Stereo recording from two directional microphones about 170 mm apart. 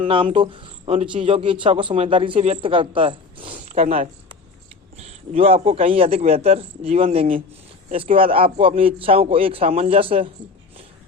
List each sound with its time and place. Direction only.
0.3 s speech: 30° right (ahead or behind)